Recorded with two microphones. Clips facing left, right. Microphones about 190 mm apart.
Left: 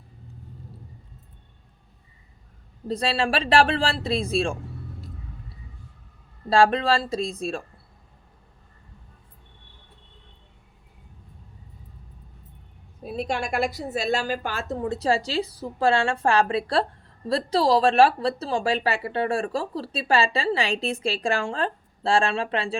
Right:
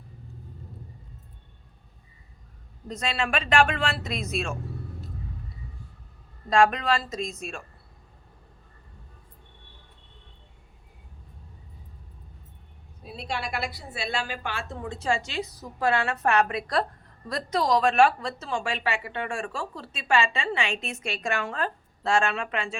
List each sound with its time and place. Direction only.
2.8 s a woman's voice: 35° left (ahead or behind)
6.5 s a woman's voice: 30° left (ahead or behind)
13.1 s a woman's voice: 50° left (ahead or behind); by 22.7 s 30° left (ahead or behind)